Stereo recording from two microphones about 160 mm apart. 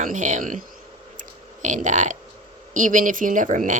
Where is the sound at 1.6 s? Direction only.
50° right (ahead or behind).